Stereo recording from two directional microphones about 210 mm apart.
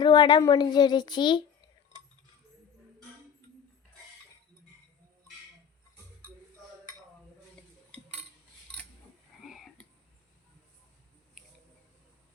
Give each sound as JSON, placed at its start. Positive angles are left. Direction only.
{"t": 0.0, "sound": "speech", "side_deg": 20}
{"t": 7.9, "sound": "cutlery", "side_deg": 5}
{"t": 8.7, "sound": "scissors", "side_deg": 5}
{"t": 9.4, "sound": "whispering", "side_deg": 0}
{"t": 11.4, "sound": "a sound", "side_deg": 0}